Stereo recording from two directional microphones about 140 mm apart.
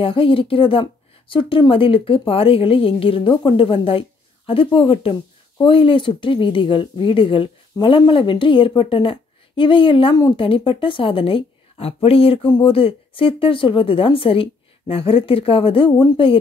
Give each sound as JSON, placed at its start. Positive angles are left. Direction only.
{"t": 0.0, "sound": "a woman's voice", "side_deg": 40}